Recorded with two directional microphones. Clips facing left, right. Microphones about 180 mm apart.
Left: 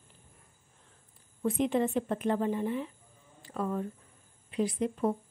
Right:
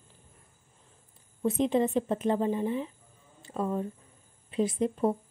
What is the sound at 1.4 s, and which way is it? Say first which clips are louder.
A woman's voice: right 2 dB; 25° right (ahead or behind).